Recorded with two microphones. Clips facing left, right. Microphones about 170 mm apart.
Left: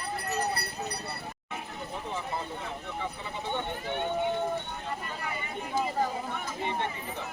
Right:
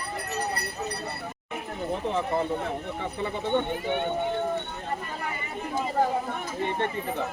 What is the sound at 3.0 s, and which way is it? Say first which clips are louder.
Speech: right 6 dB; 60° right (ahead or behind).